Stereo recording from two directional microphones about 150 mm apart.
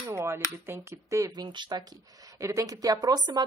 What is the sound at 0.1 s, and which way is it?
A woman's voice, 15° right (ahead or behind).